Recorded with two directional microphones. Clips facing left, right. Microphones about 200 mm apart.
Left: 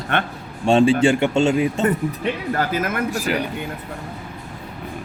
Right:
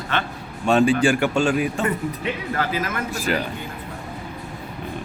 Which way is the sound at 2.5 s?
50° left (ahead or behind).